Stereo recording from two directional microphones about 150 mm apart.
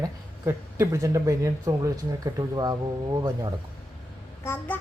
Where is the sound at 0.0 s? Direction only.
20° right (ahead or behind).